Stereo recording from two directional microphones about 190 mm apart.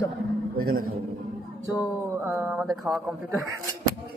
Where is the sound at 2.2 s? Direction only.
10° right (ahead or behind).